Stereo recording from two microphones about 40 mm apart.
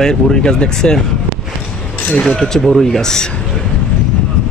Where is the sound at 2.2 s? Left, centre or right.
Centre.